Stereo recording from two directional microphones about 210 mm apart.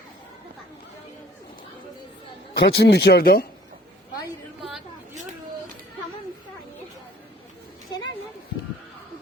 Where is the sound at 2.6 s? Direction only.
50° left (ahead or behind).